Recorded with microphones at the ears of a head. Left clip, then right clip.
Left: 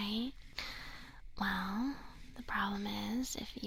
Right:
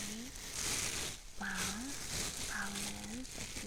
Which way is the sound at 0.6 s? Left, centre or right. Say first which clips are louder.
Right 8 dB; right.